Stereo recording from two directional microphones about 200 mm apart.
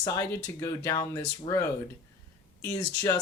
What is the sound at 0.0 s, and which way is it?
Speech, 15° left (ahead or behind).